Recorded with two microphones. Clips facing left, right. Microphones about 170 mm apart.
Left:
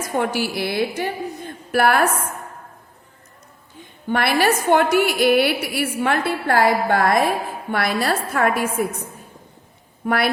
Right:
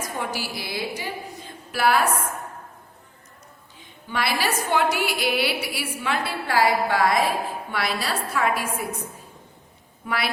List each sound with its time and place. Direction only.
0.2 s a woman's voice: 60° left (ahead or behind)
4.1 s a woman's voice: 55° left (ahead or behind)
10.0 s a woman's voice: 50° left (ahead or behind)